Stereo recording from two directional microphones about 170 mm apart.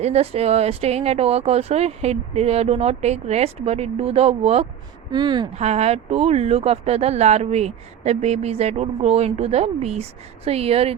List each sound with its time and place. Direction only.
0.0 s speech: 40° right (ahead or behind)
5.1 s speech: 25° right (ahead or behind)
5.5 s speech: 40° right (ahead or behind)